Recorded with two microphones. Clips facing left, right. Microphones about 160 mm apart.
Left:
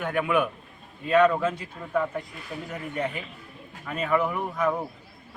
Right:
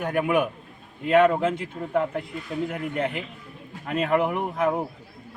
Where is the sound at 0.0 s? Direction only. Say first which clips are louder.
Right 2 dB; 40° right (ahead or behind).